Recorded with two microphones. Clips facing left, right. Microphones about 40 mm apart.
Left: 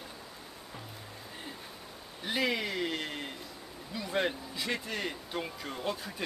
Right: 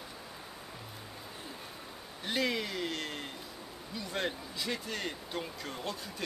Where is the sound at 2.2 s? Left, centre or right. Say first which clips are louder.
Left 1 dB; centre.